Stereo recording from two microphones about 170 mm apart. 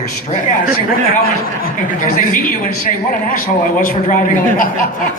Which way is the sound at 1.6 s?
55° left (ahead or behind).